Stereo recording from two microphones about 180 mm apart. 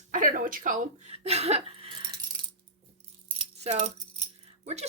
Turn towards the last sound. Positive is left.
turn(degrees=-35)  # may be behind; listen again after turning